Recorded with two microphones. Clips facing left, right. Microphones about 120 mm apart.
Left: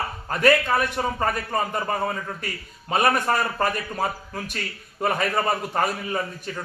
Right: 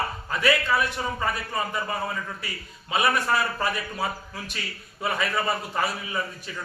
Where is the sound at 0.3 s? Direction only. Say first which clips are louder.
Left 5 dB; 50° left (ahead or behind).